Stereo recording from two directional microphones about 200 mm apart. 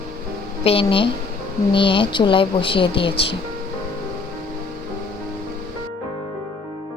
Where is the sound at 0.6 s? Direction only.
25° left (ahead or behind).